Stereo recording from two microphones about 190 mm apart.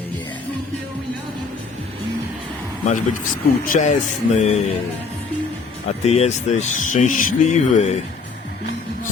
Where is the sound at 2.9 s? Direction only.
45° left (ahead or behind).